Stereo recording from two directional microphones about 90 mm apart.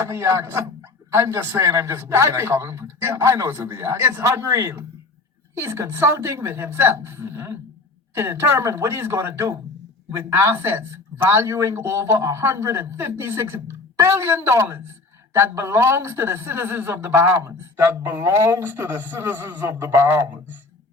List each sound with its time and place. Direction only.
0.1 s speech: 30° right (ahead or behind)